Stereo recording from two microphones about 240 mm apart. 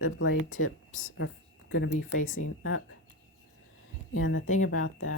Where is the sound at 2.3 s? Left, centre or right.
Left.